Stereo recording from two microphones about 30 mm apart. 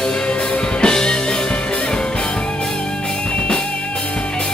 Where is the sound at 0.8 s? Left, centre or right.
Left.